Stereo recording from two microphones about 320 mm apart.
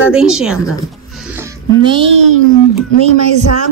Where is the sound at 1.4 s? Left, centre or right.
Centre.